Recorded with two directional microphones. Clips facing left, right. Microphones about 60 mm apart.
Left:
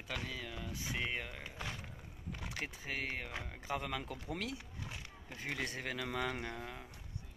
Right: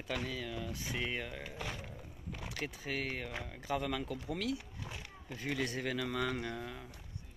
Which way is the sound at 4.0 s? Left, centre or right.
Left.